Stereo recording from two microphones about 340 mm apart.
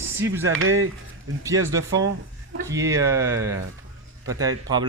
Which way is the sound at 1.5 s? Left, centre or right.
Centre.